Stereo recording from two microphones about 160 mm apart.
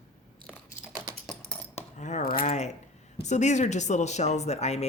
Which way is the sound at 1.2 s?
5° left (ahead or behind).